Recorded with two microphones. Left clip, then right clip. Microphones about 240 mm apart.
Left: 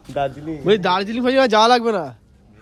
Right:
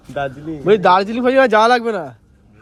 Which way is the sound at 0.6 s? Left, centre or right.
Centre.